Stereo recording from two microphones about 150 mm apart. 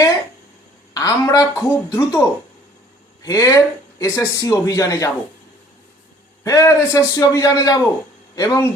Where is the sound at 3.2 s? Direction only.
25° left (ahead or behind).